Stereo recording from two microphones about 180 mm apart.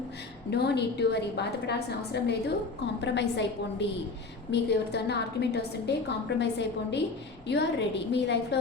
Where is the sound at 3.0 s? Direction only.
75° left (ahead or behind).